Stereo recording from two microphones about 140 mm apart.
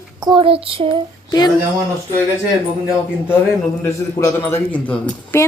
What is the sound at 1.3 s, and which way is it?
Speech, 30° left (ahead or behind).